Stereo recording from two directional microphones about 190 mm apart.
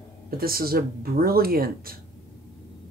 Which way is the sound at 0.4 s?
50° right (ahead or behind).